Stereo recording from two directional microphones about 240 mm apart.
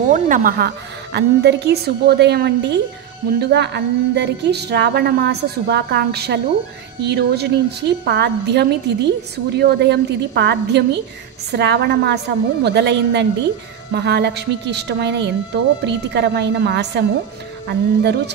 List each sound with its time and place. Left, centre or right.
0.1 s a woman's voice: right